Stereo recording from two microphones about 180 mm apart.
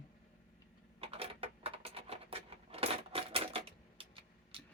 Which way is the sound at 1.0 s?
30° right (ahead or behind).